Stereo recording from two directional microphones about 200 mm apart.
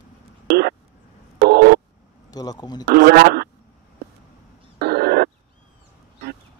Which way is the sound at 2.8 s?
50° right (ahead or behind).